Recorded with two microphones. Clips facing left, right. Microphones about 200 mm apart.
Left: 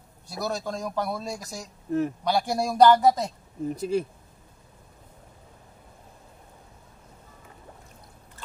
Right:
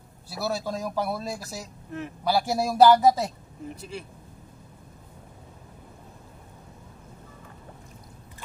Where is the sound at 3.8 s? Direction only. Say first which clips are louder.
Left 12 dB; 40° left (ahead or behind).